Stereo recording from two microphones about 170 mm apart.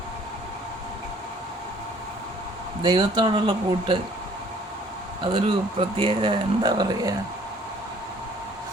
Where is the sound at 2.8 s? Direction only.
25° right (ahead or behind).